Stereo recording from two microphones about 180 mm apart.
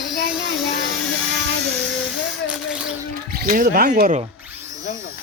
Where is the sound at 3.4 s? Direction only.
50° right (ahead or behind).